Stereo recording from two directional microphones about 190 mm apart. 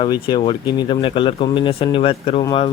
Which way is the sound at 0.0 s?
25° left (ahead or behind).